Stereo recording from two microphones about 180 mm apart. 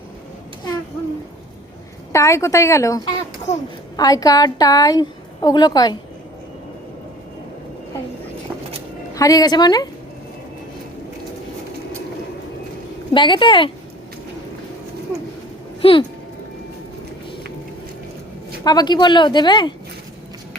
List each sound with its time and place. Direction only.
2.1 s a woman's voice: 15° left (ahead or behind)
3.5 s a child's voice: 40° left (ahead or behind)
3.9 s a woman's voice: 20° left (ahead or behind)
9.1 s a woman's voice: 20° left (ahead or behind)
13.1 s a woman's voice: 25° left (ahead or behind)
15.8 s speech: 30° left (ahead or behind)
18.6 s a woman's voice: 20° left (ahead or behind)